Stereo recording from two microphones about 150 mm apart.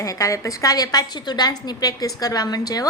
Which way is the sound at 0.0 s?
20° left (ahead or behind).